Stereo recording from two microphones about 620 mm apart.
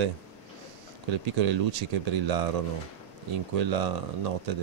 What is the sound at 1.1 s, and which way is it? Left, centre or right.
Speech, right.